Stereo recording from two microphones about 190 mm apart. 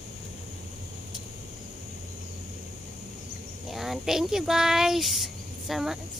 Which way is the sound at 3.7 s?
Centre (ahead or behind).